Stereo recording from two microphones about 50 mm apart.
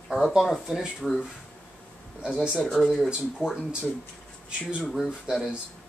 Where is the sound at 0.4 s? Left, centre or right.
Centre.